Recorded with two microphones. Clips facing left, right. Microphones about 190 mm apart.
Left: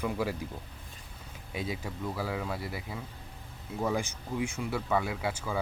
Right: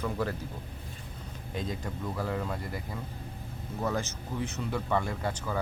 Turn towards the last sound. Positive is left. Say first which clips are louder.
# even
turn(degrees=10)  # may be behind; listen again after turning